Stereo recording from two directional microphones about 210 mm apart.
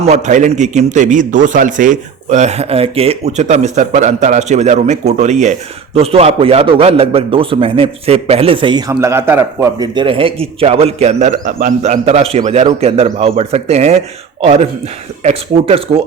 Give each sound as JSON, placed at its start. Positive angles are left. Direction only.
{"t": 0.0, "sound": "a man's voice", "side_deg": -35}